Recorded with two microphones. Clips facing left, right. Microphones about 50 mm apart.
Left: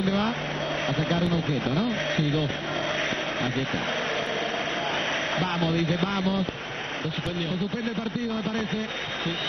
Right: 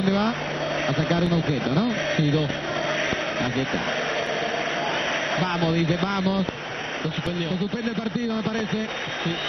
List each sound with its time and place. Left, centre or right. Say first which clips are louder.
0.8 s speech: right 3 dB; centre
1.3 s speech: right 3 dB; centre
5.4 s speech: right 3 dB; centre